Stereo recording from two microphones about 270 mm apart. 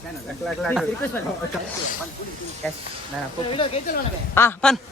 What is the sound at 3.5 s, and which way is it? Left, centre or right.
Speech, centre.